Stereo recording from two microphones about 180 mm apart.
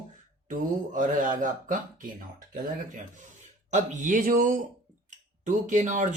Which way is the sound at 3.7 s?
45° right (ahead or behind).